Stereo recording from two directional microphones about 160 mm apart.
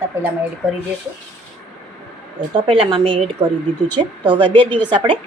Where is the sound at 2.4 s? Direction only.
35° right (ahead or behind).